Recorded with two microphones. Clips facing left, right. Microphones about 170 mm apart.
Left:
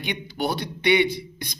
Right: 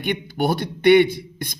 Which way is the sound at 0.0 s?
50° right (ahead or behind).